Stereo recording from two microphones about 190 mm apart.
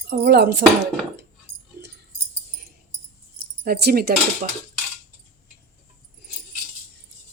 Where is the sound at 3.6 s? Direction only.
55° right (ahead or behind).